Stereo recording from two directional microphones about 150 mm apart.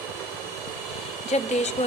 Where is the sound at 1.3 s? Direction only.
50° left (ahead or behind).